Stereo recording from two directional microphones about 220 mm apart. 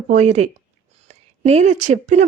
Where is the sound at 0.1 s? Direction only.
30° right (ahead or behind).